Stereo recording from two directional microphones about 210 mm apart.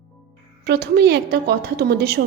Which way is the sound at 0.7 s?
50° right (ahead or behind).